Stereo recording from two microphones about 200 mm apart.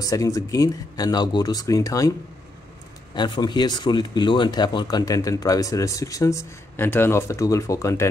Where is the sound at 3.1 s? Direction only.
20° left (ahead or behind).